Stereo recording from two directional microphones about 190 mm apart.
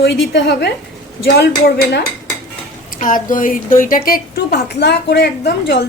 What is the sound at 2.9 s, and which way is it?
A woman's voice, 45° left (ahead or behind).